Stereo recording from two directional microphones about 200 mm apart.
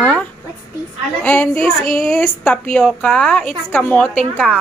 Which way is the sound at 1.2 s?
5° left (ahead or behind).